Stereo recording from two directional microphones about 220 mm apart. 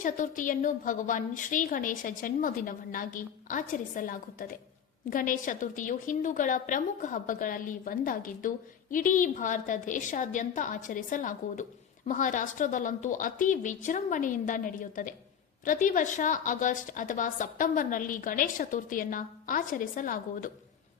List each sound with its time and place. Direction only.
0.0 s a woman's voice: 35° left (ahead or behind)